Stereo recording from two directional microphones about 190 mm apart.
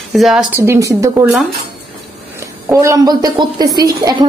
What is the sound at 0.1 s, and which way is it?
A woman's voice, centre (ahead or behind).